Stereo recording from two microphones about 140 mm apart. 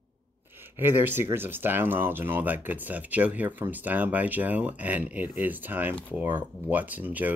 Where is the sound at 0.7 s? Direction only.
15° right (ahead or behind).